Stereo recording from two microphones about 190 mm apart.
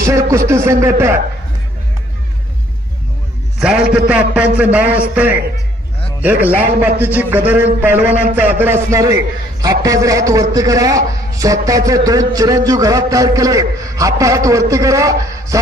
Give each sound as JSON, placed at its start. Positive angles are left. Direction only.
{"t": 0.0, "sound": "a man's voice", "side_deg": -15}
{"t": 3.5, "sound": "a man's voice", "side_deg": -5}